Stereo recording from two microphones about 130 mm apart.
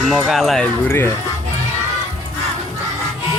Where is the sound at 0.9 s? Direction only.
20° left (ahead or behind).